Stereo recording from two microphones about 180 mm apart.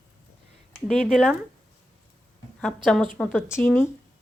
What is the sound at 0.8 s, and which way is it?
Speech, centre (ahead or behind).